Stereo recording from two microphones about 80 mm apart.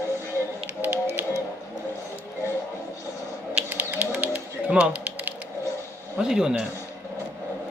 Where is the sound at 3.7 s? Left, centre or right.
Right.